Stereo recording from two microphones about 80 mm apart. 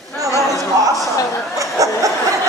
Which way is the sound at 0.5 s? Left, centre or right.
Right.